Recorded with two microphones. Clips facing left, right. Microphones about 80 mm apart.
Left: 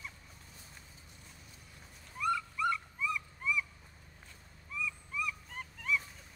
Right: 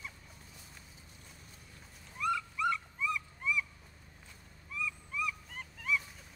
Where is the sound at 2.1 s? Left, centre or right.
Centre.